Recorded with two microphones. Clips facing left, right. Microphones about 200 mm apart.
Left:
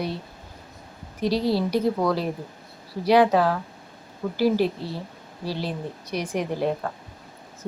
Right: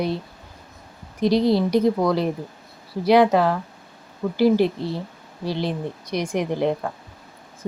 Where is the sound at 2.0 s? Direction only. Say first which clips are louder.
Right 3 dB; 10° right (ahead or behind).